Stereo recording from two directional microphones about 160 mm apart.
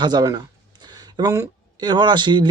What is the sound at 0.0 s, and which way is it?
A man's voice, 25° right (ahead or behind).